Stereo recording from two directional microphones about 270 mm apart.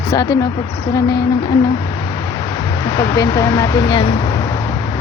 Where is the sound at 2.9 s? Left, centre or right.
Centre.